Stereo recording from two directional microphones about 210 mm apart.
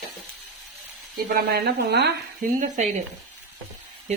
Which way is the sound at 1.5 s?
50° right (ahead or behind).